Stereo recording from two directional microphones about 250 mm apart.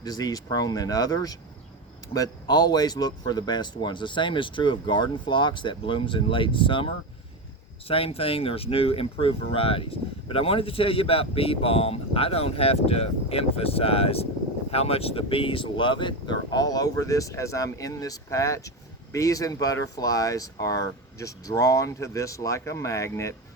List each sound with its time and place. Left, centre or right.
0.0 s speech: centre